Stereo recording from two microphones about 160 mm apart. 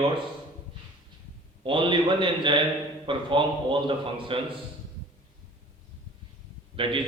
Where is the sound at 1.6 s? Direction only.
30° right (ahead or behind).